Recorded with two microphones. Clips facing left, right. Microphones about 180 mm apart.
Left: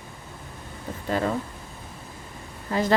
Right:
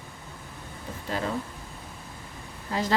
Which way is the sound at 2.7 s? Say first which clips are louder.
Left 5 dB; 55° left (ahead or behind).